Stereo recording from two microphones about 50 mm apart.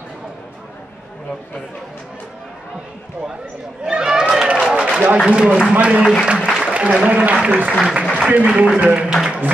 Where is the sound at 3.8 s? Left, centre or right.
Centre.